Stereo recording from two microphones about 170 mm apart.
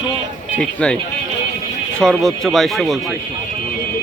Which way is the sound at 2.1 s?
Centre (ahead or behind).